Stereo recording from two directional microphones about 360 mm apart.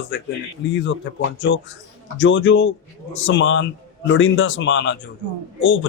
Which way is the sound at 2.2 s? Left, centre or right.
Left.